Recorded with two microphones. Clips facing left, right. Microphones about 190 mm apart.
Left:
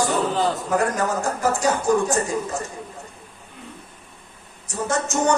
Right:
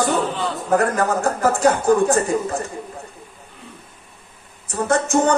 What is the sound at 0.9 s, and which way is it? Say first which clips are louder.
A man's voice: right 4 dB; 60° right (ahead or behind).